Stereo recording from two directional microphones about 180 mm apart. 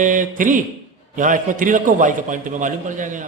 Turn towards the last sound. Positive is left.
turn(degrees=-45)  # may be behind; listen again after turning